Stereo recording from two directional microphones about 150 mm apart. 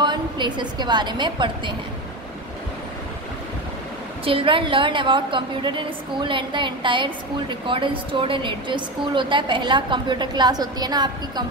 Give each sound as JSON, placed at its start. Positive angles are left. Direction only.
{"t": 0.0, "sound": "a woman's voice", "side_deg": -30}
{"t": 4.2, "sound": "a woman's voice", "side_deg": -35}